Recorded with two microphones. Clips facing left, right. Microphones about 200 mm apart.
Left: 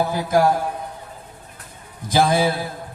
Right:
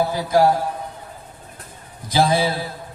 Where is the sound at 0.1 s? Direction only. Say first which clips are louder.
Right 1 dB; 50° left (ahead or behind).